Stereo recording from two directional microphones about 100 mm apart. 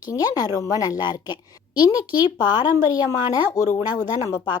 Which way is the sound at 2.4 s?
45° left (ahead or behind).